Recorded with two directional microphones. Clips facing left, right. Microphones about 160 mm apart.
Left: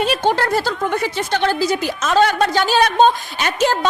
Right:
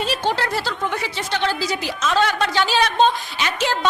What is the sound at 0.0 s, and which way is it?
A woman's voice, 55° left (ahead or behind).